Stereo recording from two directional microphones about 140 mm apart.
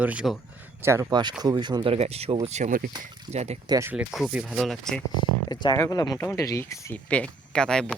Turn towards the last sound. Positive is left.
turn(degrees=5)  # may be behind; listen again after turning